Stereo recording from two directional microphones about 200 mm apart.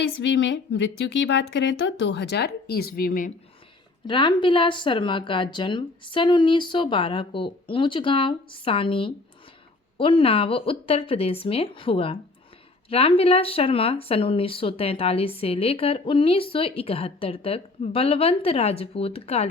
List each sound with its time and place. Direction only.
0.2 s a woman's voice: 65° left (ahead or behind); by 3.3 s 45° left (ahead or behind)
4.0 s speech: 25° left (ahead or behind)